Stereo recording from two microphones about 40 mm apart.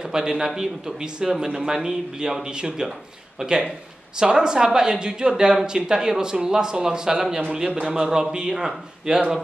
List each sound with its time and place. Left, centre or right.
0.1 s speech: centre